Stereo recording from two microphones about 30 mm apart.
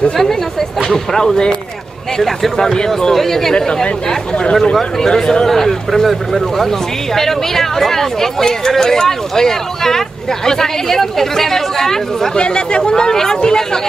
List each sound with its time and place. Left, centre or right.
0.2 s chatter: centre
0.8 s speech: centre
2.1 s speech: centre
2.5 s speech: left
3.5 s speech: left
4.7 s speech: centre
12.4 s speech: left